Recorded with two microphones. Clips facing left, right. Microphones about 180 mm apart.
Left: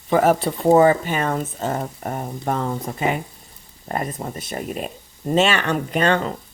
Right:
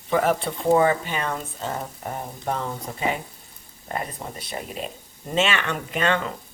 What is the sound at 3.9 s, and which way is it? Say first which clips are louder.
Speech: left 5 dB; 45° left (ahead or behind).